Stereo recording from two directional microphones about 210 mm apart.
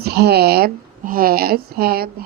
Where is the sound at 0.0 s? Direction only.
50° right (ahead or behind).